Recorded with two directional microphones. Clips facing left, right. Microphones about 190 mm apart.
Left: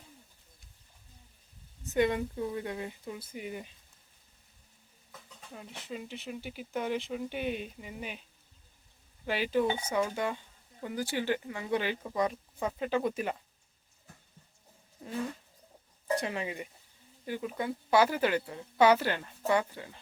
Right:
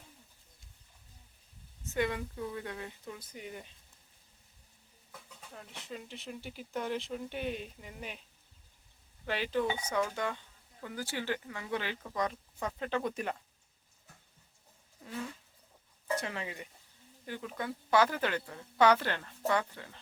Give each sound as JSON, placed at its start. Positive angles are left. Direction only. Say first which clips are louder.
{"t": 1.8, "sound": "speech", "louder": "left 5 dB", "side_deg": 20}
{"t": 5.5, "sound": "speech", "louder": "left 3 dB", "side_deg": 5}
{"t": 9.2, "sound": "speech", "louder": "left 3 dB", "side_deg": 10}
{"t": 16.2, "sound": "speech", "louder": "left 5 dB", "side_deg": 20}